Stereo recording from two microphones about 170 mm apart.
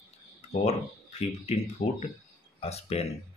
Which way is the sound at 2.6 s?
35° left (ahead or behind).